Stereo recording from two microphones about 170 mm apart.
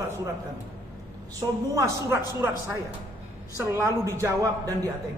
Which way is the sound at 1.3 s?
15° right (ahead or behind).